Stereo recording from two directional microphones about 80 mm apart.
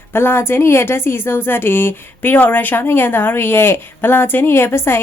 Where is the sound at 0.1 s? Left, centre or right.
Left.